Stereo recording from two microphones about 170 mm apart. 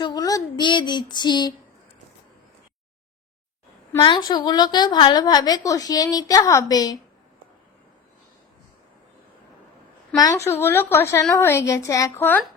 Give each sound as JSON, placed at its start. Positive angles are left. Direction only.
{"t": 0.0, "sound": "speech", "side_deg": 25}
{"t": 4.0, "sound": "a woman's voice", "side_deg": 25}
{"t": 10.2, "sound": "speech", "side_deg": 20}